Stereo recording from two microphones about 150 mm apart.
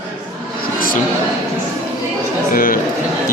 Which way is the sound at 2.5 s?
70° left (ahead or behind).